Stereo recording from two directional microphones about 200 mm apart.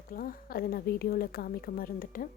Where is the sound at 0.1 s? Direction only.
45° left (ahead or behind).